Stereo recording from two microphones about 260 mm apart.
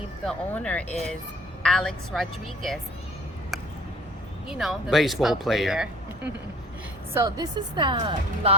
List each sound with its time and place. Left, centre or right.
0.3 s speech: centre
4.4 s speech: centre
7.1 s a woman's voice: centre